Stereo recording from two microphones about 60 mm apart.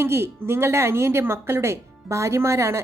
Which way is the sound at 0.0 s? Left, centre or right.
Right.